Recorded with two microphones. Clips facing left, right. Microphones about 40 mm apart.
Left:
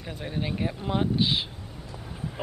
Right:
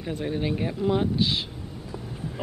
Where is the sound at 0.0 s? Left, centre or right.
Centre.